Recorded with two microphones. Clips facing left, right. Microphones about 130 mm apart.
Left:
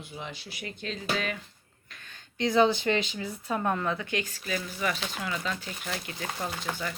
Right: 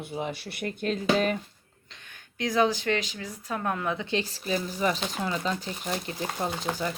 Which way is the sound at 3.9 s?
25° right (ahead or behind).